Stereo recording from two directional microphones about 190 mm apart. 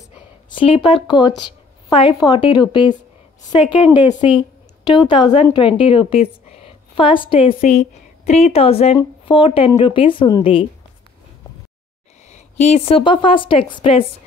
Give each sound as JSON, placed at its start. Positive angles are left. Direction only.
{"t": 0.5, "sound": "a woman's voice", "side_deg": 25}
{"t": 3.6, "sound": "a woman's voice", "side_deg": -5}
{"t": 4.0, "sound": "a woman's voice", "side_deg": 25}
{"t": 12.3, "sound": "a woman's voice", "side_deg": 40}